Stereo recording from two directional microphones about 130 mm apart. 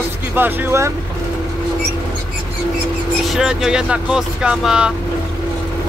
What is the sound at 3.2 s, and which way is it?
Speech, 5° right (ahead or behind).